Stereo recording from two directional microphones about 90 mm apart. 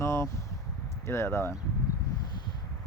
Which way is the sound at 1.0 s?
30° left (ahead or behind).